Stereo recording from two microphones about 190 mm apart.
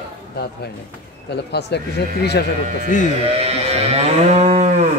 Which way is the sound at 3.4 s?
35° right (ahead or behind).